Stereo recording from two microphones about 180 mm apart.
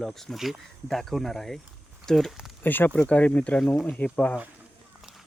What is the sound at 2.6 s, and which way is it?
Speech, 10° left (ahead or behind).